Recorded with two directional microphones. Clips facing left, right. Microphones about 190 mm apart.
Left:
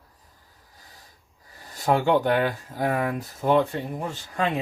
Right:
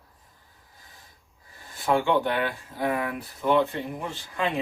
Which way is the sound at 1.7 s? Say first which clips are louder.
Left 2 dB; 40° left (ahead or behind).